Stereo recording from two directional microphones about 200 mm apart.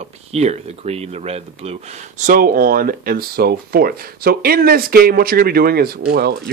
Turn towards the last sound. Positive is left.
turn(degrees=-50)  # may be behind; listen again after turning